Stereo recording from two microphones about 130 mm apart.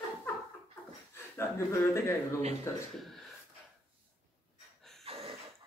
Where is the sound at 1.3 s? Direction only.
20° left (ahead or behind).